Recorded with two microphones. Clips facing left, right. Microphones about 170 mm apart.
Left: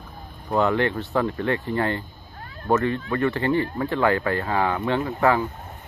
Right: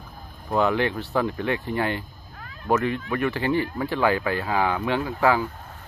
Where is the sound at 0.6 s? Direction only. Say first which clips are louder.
Left 1 dB; 10° right (ahead or behind).